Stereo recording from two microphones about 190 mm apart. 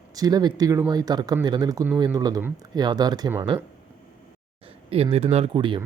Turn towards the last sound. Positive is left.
turn(degrees=-25)  # may be behind; listen again after turning